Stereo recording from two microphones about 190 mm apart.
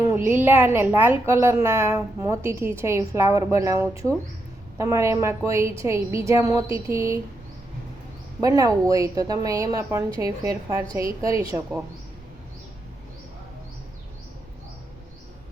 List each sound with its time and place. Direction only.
0.3 s a woman's voice: 10° right (ahead or behind)
8.4 s a woman's voice: 20° right (ahead or behind)